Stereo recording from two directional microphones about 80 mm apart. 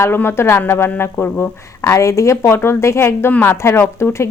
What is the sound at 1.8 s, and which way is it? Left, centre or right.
Speech, left.